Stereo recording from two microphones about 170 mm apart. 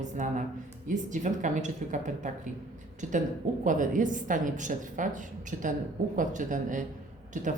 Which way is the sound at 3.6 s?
50° right (ahead or behind).